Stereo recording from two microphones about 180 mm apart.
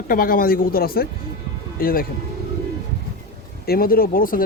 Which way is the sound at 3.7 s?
55° left (ahead or behind).